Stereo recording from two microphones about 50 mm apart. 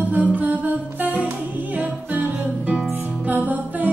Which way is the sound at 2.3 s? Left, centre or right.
Right.